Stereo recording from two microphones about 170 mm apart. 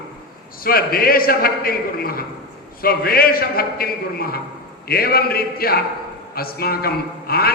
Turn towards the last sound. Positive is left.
turn(degrees=65)  # may be behind; listen again after turning